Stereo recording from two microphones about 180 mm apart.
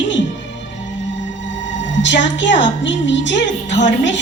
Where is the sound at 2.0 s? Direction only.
90° left.